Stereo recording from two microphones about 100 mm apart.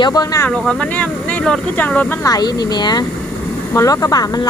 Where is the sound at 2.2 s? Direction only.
40° left (ahead or behind).